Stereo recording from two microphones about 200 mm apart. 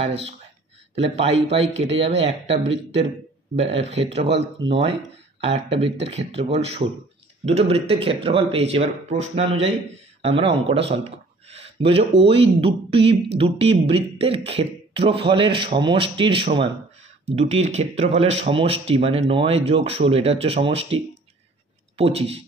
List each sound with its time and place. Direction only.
0.0 s speech: 30° right (ahead or behind)